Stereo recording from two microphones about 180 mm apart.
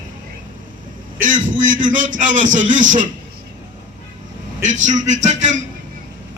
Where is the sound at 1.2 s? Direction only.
45° right (ahead or behind).